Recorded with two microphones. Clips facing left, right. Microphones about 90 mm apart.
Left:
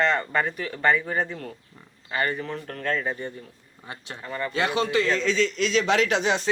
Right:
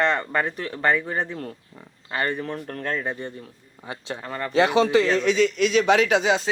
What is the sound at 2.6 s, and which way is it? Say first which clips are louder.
A man's voice: left 3 dB; 35° right (ahead or behind).